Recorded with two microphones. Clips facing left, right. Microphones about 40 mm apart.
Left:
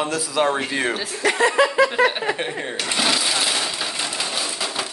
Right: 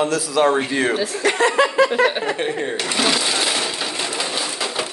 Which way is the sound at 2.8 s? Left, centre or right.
Centre.